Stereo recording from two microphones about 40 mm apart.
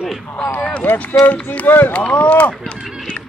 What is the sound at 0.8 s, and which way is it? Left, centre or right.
Speech, left.